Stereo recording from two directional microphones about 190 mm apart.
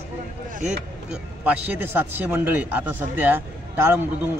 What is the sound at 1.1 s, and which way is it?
A man's voice, 10° right (ahead or behind).